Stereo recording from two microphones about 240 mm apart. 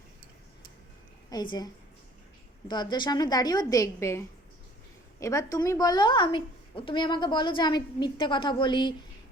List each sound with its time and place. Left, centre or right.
1.3 s a woman's voice: centre